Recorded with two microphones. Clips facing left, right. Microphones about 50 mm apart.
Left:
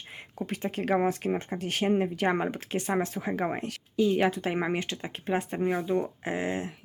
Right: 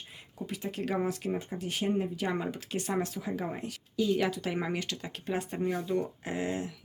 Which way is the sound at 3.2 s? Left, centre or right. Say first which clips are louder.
Left 5 dB; left.